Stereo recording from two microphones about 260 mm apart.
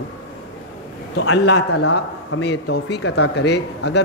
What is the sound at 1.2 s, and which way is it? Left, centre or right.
A woman's voice, left.